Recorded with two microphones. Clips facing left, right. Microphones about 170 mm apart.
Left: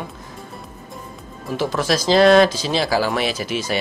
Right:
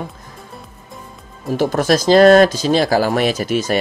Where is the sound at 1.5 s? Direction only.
45° right (ahead or behind).